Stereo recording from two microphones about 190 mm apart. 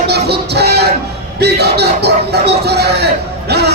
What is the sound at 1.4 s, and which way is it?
Speech, 60° right (ahead or behind).